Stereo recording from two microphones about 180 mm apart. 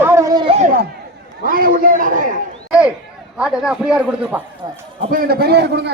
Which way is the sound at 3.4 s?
5° right (ahead or behind).